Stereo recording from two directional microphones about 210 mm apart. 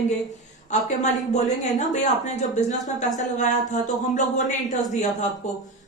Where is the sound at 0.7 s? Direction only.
35° left (ahead or behind).